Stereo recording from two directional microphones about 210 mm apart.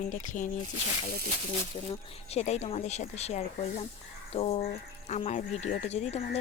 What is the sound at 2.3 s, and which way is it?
Speech, 30° left (ahead or behind).